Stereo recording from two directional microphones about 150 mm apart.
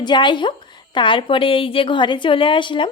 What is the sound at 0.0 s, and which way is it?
Speech, 30° left (ahead or behind).